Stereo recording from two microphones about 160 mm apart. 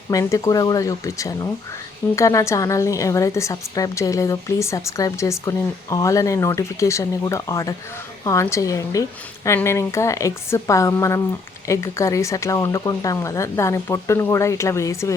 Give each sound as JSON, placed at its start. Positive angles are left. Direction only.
{"t": 0.1, "sound": "a woman's voice", "side_deg": 20}